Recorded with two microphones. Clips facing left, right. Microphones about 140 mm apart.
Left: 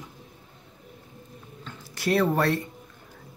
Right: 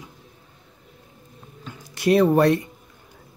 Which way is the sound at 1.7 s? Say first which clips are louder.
Right 7 dB; 20° right (ahead or behind).